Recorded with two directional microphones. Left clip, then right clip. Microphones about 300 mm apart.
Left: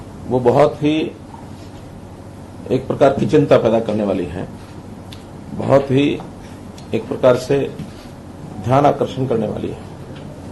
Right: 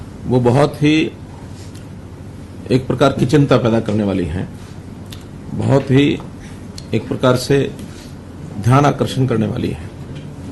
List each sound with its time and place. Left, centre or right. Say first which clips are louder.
0.4 s speech: left 2 dB; right
2.6 s a man's voice: left 1 dB; right
5.6 s a man's voice: left 1 dB; right
8.7 s a man's voice: left 1 dB; right